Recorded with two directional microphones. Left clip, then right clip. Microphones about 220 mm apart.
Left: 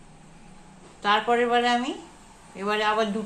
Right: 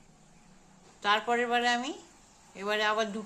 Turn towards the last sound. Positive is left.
turn(degrees=-25)  # may be behind; listen again after turning